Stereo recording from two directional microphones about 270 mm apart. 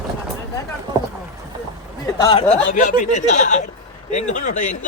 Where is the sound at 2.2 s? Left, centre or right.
Left.